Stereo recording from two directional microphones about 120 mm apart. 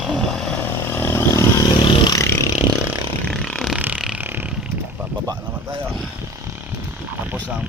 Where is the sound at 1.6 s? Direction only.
45° left (ahead or behind).